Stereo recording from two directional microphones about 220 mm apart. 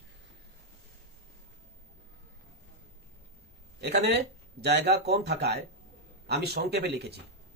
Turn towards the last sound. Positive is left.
turn(degrees=-50)  # may be behind; listen again after turning